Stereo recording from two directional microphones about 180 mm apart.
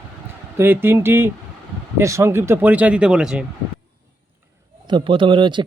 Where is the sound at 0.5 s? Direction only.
10° right (ahead or behind).